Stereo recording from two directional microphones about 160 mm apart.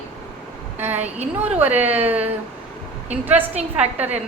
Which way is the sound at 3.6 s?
45° right (ahead or behind).